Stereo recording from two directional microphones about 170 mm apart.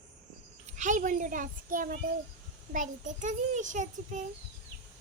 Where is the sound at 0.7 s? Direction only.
45° right (ahead or behind).